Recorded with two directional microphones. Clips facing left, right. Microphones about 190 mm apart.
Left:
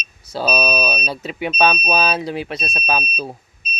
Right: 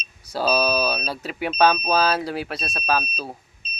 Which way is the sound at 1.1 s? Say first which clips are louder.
Left 3 dB; 5° right (ahead or behind).